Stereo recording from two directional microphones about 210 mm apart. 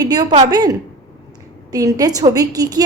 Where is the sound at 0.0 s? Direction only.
20° right (ahead or behind).